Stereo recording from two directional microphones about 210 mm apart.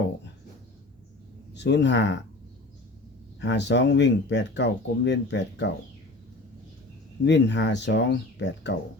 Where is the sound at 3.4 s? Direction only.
55° left (ahead or behind).